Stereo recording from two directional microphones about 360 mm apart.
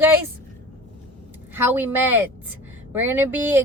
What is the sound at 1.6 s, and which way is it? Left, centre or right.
Speech, centre.